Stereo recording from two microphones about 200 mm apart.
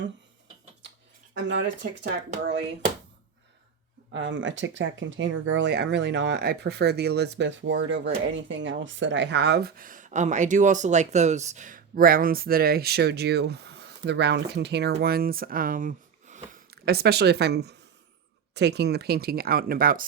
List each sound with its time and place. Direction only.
1.3 s speech: 65° right (ahead or behind)
4.1 s speech: 70° right (ahead or behind); by 20.1 s 45° right (ahead or behind)